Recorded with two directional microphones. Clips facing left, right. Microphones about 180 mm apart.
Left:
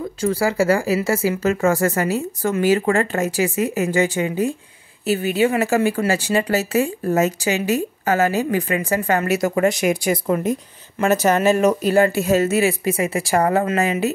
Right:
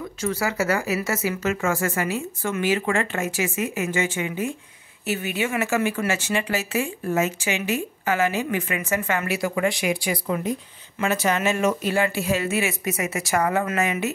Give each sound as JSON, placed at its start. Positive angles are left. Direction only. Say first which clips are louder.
{"t": 0.2, "sound": "speech", "louder": "left 6 dB", "side_deg": 30}